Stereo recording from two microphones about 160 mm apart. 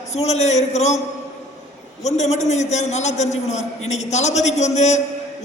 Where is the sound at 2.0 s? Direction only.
45° left (ahead or behind).